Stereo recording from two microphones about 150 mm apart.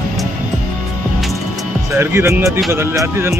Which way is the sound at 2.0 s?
15° right (ahead or behind).